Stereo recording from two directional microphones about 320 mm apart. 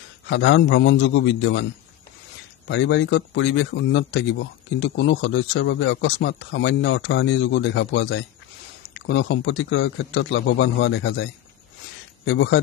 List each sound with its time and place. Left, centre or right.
0.3 s a man's voice: left
2.7 s a man's voice: left
12.3 s a man's voice: left